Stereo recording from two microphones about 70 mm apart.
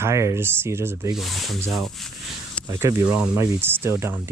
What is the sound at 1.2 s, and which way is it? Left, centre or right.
Speech, centre.